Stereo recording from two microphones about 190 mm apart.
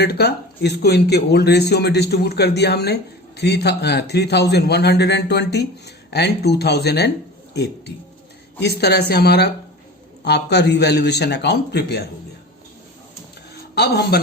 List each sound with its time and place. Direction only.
0.0 s speech: 60° left (ahead or behind)
13.7 s speech: 60° left (ahead or behind)